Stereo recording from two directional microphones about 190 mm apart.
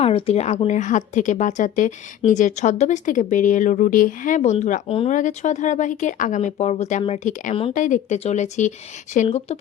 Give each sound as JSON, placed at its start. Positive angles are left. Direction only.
{"t": 0.0, "sound": "a woman's voice", "side_deg": 30}